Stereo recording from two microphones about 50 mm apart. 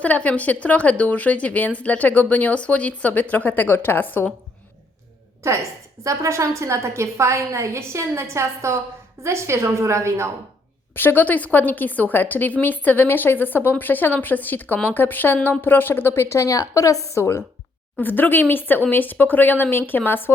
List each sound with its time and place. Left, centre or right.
0.0 s a woman's voice: left
6.0 s a woman's voice: right
10.9 s a woman's voice: left
18.0 s a woman's voice: left